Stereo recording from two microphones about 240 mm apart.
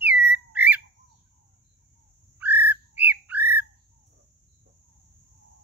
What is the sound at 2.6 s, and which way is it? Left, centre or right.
Bird, centre.